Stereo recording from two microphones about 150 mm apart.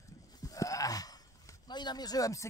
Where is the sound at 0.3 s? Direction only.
25° left (ahead or behind).